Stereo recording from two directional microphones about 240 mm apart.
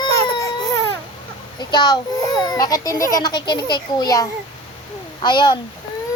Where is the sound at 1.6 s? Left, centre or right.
Centre.